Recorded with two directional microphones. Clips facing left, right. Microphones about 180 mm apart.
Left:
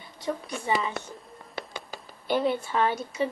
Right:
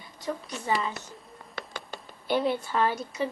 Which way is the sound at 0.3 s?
10° left (ahead or behind).